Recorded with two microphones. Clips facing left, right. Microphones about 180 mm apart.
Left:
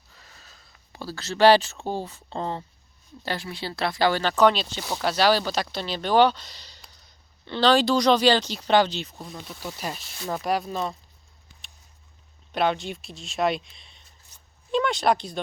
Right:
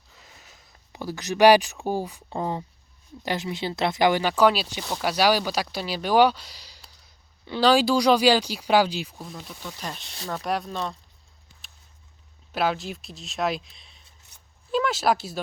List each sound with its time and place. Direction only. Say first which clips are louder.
0.1 s speech: right 1 dB; 20° right (ahead or behind); by 10.9 s 5° left (ahead or behind)
12.5 s speech: left 1 dB; 5° right (ahead or behind)